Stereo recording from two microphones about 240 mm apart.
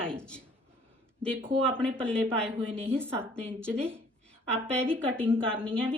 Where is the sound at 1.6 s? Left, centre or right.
Centre.